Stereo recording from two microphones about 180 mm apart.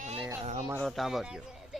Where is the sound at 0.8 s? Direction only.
Centre (ahead or behind).